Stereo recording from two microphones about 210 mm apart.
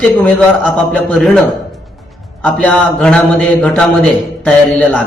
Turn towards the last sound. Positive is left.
turn(degrees=5)  # may be behind; listen again after turning